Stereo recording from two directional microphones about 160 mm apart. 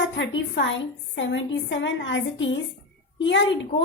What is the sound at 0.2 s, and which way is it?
A woman's voice, 90° left.